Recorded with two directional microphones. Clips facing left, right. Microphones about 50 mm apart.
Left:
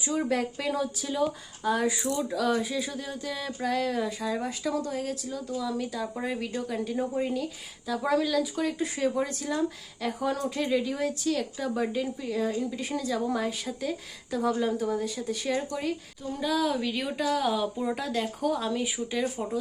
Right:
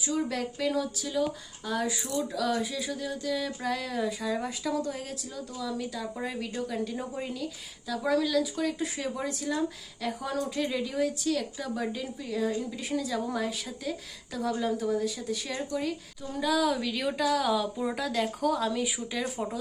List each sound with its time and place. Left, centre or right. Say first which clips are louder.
0.0 s speech: left 3 dB; left; by 19.5 s centre